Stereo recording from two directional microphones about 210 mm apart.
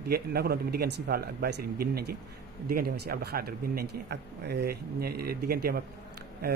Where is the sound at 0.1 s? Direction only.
45° right (ahead or behind).